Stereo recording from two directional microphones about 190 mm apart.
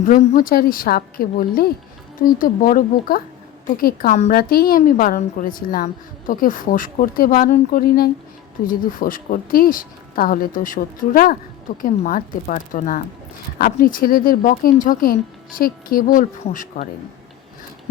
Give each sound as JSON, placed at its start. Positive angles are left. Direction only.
{"t": 0.0, "sound": "a woman's voice", "side_deg": 45}